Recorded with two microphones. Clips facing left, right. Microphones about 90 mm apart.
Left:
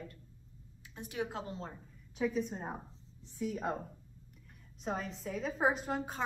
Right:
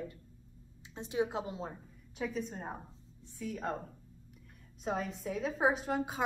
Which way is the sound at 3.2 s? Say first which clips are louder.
Left 2 dB; 15° left (ahead or behind).